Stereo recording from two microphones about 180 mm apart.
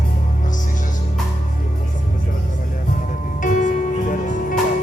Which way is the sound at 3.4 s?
45° left (ahead or behind).